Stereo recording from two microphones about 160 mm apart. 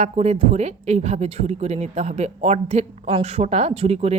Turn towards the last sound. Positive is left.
turn(degrees=-40)  # may be behind; listen again after turning